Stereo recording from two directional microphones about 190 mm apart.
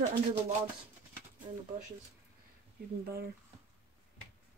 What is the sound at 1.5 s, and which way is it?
Speech, 25° right (ahead or behind).